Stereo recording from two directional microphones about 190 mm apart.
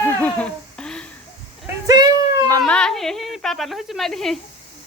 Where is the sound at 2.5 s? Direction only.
5° left (ahead or behind).